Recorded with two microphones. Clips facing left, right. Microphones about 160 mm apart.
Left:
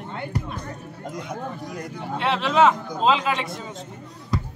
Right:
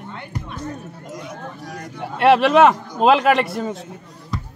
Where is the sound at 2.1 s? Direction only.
65° right (ahead or behind).